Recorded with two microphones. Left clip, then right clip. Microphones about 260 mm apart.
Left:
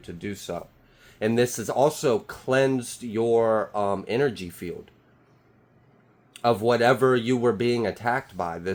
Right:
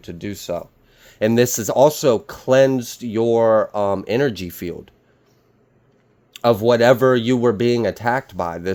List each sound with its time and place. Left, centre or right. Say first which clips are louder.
0.0 s speech: right 5 dB; right
6.3 s speech: right 6 dB; right